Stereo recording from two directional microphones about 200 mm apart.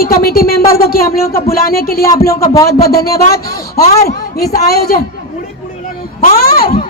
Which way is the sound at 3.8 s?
30° left (ahead or behind).